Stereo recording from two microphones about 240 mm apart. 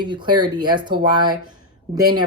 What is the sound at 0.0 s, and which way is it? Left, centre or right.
Speech, centre.